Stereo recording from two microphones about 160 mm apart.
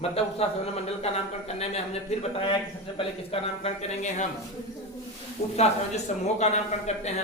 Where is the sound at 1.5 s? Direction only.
40° left (ahead or behind).